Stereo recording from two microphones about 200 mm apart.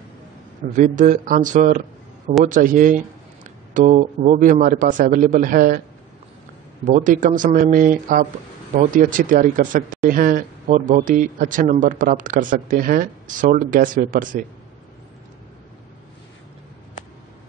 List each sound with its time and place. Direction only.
0.7 s speech: 40° right (ahead or behind)
6.8 s speech: 40° right (ahead or behind)